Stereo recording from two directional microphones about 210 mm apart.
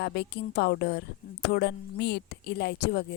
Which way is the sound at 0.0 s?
55° left (ahead or behind).